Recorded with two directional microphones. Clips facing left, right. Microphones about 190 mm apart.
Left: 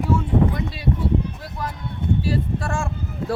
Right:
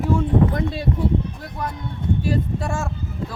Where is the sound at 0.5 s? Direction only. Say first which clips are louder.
Right 4 dB; 50° right (ahead or behind).